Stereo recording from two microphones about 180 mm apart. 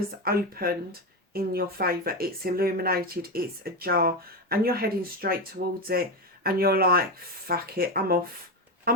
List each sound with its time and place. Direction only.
0.3 s speech: 55° right (ahead or behind)